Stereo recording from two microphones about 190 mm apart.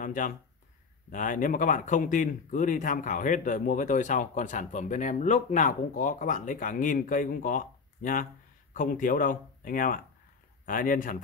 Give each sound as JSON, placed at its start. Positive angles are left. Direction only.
{"t": 0.0, "sound": "speech", "side_deg": 45}